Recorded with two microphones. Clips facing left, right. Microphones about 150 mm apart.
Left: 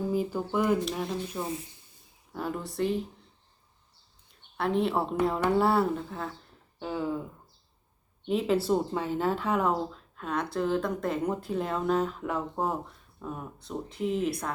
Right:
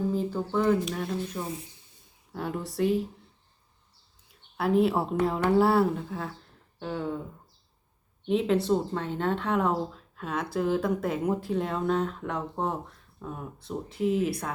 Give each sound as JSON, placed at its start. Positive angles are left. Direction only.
{"t": 0.1, "sound": "speech", "side_deg": 10}
{"t": 4.3, "sound": "speech", "side_deg": -5}
{"t": 8.3, "sound": "speech", "side_deg": 0}